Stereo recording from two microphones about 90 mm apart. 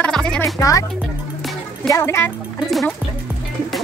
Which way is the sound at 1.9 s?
30° left (ahead or behind).